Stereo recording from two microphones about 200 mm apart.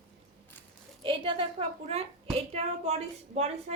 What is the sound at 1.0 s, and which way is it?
A woman's voice, 25° right (ahead or behind).